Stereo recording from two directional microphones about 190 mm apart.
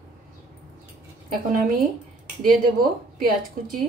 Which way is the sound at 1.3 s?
45° right (ahead or behind).